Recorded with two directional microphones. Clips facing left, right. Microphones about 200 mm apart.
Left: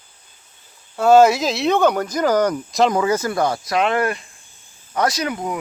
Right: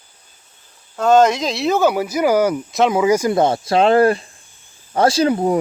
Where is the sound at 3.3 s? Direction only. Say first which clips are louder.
Right 4 dB; 25° right (ahead or behind).